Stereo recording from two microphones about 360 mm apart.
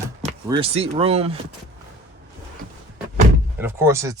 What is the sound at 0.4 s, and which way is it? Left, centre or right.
Speech, centre.